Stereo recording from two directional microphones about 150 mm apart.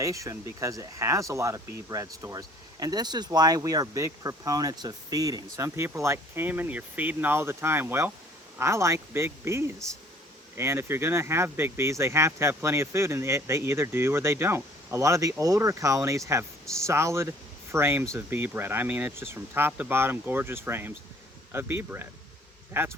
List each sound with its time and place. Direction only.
0.0 s speech: 20° right (ahead or behind)